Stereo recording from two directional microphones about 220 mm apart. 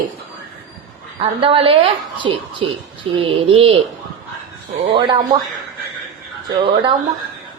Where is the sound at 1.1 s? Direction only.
25° right (ahead or behind).